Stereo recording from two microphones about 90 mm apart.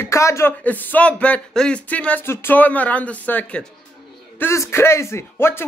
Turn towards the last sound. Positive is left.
turn(degrees=25)  # may be behind; listen again after turning